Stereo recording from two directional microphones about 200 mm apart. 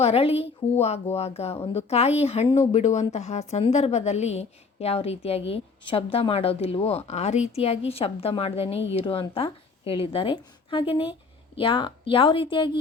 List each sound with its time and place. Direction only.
0.0 s a woman's voice: 30° left (ahead or behind)